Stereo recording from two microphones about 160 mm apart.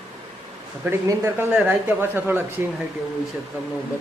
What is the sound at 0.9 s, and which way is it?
Speech, 15° right (ahead or behind).